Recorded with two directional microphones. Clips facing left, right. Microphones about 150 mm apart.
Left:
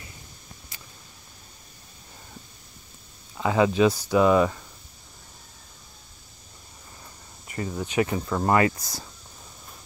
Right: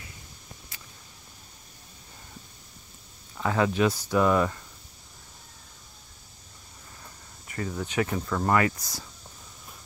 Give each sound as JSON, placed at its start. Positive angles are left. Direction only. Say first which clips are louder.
{"t": 3.3, "sound": "speech", "louder": "left 4 dB", "side_deg": 15}
{"t": 7.4, "sound": "speech", "louder": "left 2 dB", "side_deg": 20}
{"t": 8.4, "sound": "speech", "louder": "left 3 dB", "side_deg": 25}